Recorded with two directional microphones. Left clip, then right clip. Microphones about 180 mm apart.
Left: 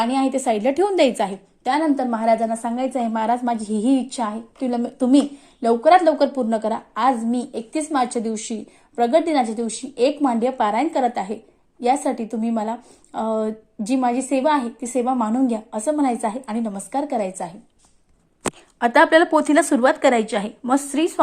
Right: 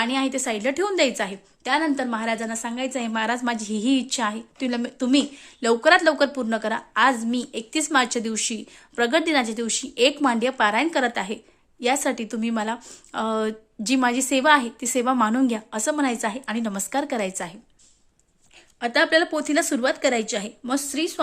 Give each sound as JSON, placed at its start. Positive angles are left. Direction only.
{"t": 0.0, "sound": "a woman's voice", "side_deg": -5}
{"t": 12.7, "sound": "speech", "side_deg": -50}
{"t": 13.3, "sound": "a woman's voice", "side_deg": -20}
{"t": 18.8, "sound": "a woman's voice", "side_deg": -10}